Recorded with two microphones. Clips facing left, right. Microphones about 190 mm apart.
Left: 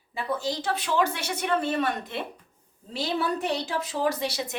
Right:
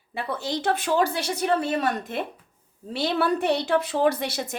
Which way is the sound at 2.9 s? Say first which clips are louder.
Right 4 dB; 65° right (ahead or behind).